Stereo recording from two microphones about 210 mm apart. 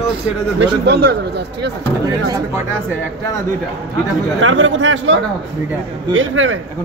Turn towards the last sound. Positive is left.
turn(degrees=-65)  # may be behind; listen again after turning